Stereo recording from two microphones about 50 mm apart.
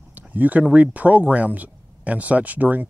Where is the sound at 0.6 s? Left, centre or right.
Right.